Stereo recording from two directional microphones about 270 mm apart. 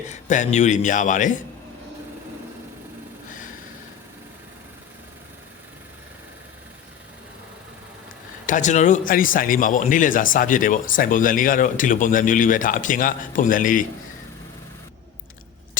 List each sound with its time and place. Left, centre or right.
0.1 s speech: left
8.4 s speech: left